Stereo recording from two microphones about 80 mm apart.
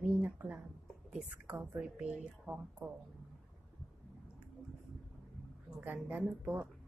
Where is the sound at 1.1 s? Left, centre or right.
Centre.